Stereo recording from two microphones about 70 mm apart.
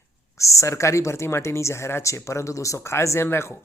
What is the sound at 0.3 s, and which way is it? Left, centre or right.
Speech, left.